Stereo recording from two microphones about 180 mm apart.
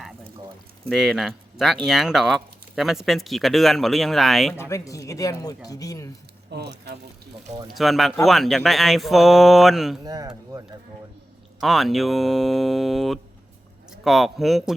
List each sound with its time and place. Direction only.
0.9 s speech: centre (ahead or behind)
4.5 s speech: 15° left (ahead or behind)
6.5 s speech: 65° right (ahead or behind)
7.7 s speech: centre (ahead or behind)
10.0 s speech: 20° right (ahead or behind)
11.6 s speech: centre (ahead or behind)